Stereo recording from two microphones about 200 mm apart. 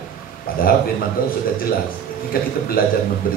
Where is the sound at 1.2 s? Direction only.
45° left (ahead or behind).